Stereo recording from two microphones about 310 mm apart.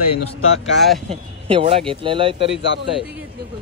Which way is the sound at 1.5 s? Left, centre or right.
Centre.